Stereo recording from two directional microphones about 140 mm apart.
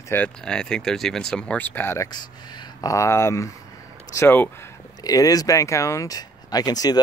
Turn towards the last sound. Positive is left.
turn(degrees=25)  # may be behind; listen again after turning